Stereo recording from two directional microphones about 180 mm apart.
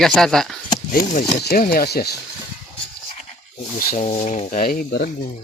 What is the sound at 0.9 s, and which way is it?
Speech, 45° left (ahead or behind).